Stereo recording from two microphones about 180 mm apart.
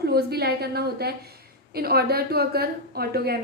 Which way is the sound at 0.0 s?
60° right (ahead or behind).